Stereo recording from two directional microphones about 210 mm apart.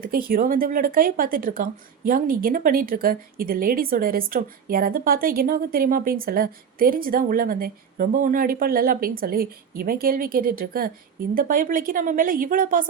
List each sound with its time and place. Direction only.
0.0 s a woman's voice: 45° right (ahead or behind)